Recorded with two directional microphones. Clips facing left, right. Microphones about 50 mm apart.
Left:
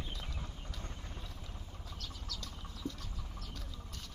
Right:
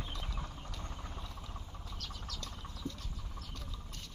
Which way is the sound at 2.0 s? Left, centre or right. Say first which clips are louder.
Right 1 dB; right.